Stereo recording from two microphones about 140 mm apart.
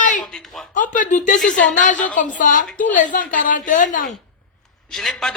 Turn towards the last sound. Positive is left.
turn(degrees=0)  # may be behind; listen again after turning